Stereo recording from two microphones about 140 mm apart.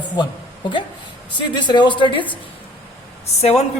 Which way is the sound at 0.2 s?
35° left (ahead or behind).